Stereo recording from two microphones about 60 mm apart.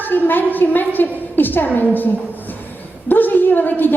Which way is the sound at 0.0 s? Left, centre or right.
Left.